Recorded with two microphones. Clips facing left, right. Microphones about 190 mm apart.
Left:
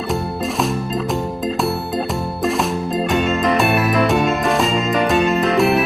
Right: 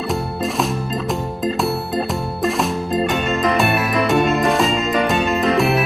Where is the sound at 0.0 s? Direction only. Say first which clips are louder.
Even; centre (ahead or behind).